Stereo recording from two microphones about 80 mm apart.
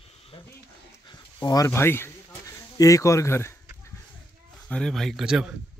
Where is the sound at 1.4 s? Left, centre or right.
Left.